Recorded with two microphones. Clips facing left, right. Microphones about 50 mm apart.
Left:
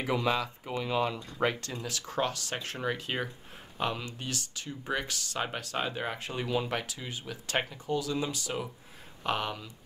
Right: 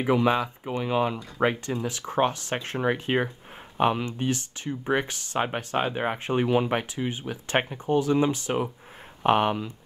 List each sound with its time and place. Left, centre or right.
0.0 s speech: right